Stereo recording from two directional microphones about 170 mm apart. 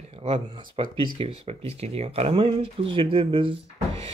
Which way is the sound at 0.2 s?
35° right (ahead or behind).